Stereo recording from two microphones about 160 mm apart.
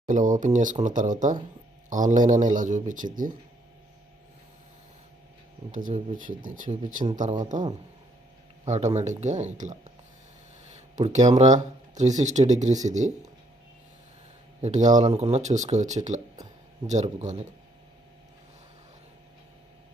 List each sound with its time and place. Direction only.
0.0 s speech: 55° right (ahead or behind)
5.9 s speech: 55° right (ahead or behind)
8.6 s speech: 45° right (ahead or behind)
10.7 s a sound: 45° right (ahead or behind)
11.3 s speech: 45° right (ahead or behind)
14.6 s speech: 50° right (ahead or behind)